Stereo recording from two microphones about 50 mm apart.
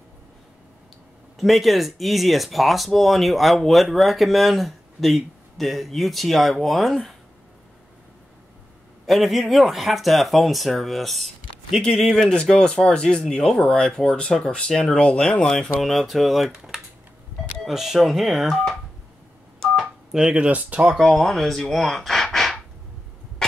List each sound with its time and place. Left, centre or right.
1.4 s speech: centre
9.0 s speech: centre
11.8 s speech: centre
14.7 s speech: centre
15.8 s speech: centre
18.5 s speech: centre
19.6 s telephone dialing: centre
20.1 s speech: centre
20.3 s speech: right
20.9 s speech: centre